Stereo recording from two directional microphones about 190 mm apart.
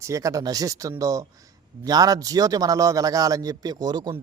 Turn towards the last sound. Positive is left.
turn(degrees=-20)  # may be behind; listen again after turning